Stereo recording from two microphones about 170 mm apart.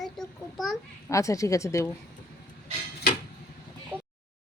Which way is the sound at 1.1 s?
20° left (ahead or behind).